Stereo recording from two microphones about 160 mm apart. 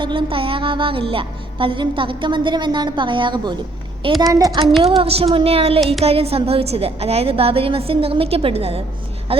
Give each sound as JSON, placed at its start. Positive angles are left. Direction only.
{"t": 0.0, "sound": "music", "side_deg": -30}
{"t": 4.2, "sound": "a woman's voice", "side_deg": -20}
{"t": 4.8, "sound": "music", "side_deg": -35}